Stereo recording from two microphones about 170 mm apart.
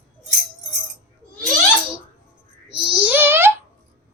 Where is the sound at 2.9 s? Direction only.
10° right (ahead or behind).